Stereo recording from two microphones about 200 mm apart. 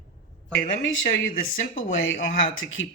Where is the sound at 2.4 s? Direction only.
80° left.